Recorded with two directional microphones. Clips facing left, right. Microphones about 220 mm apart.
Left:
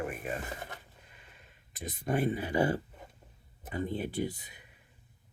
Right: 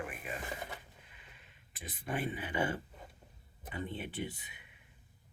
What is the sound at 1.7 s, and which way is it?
Speech, 40° left (ahead or behind).